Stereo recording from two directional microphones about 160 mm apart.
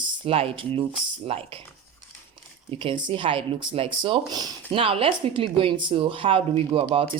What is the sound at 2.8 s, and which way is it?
Speech, 30° right (ahead or behind).